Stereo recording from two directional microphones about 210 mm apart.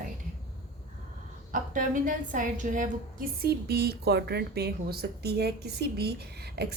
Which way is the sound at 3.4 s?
50° right (ahead or behind).